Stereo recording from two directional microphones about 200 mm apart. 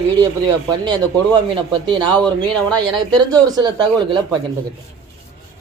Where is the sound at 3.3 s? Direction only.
20° right (ahead or behind).